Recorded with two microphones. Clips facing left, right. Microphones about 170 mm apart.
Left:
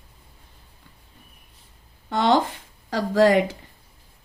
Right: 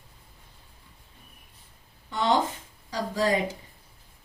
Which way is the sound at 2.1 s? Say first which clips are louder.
Left 5 dB; 80° left.